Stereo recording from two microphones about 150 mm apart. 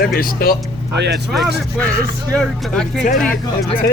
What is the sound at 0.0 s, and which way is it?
Speech, 75° left (ahead or behind).